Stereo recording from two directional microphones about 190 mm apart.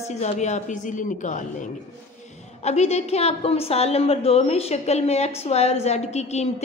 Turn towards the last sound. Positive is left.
turn(degrees=35)  # may be behind; listen again after turning